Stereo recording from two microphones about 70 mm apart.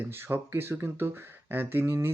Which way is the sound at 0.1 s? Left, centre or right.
Right.